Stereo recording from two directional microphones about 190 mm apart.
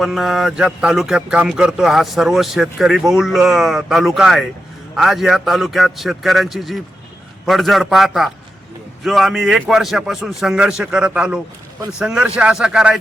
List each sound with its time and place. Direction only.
0.0 s a man's voice: centre (ahead or behind)